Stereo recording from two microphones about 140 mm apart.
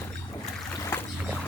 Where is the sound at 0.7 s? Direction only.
20° left (ahead or behind).